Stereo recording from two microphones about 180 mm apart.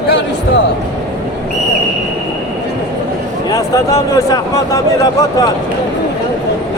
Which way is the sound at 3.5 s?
20° left (ahead or behind).